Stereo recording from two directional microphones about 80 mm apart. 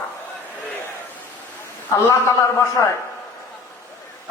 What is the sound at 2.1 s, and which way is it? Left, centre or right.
Speech, left.